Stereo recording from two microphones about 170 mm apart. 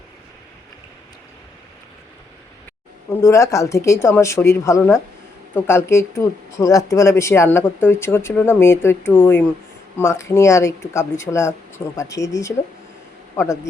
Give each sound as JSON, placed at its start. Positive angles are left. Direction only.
{"t": 3.1, "sound": "speech", "side_deg": 15}